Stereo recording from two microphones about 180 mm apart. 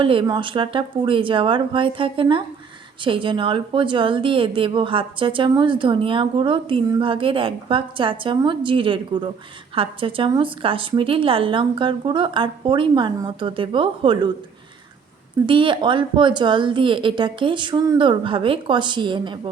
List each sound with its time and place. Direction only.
0.0 s a woman's voice: 30° right (ahead or behind)
15.4 s a woman's voice: 25° right (ahead or behind)